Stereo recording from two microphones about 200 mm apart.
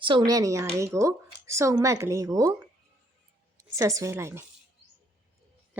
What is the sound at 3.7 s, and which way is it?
Speech, 15° right (ahead or behind).